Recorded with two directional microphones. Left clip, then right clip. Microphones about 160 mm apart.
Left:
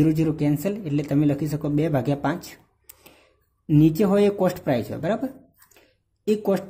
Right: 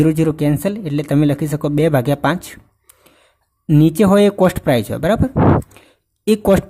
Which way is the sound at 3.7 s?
40° right (ahead or behind).